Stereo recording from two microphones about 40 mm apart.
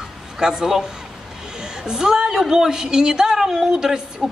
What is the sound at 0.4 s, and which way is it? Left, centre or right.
A woman's voice, centre.